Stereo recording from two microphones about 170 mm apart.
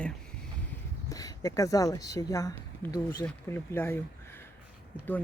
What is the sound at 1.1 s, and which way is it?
Speech, 20° left (ahead or behind).